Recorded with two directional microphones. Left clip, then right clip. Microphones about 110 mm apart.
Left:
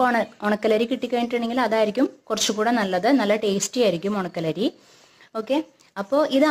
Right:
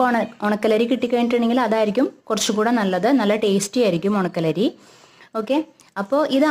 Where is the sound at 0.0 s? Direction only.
25° right (ahead or behind).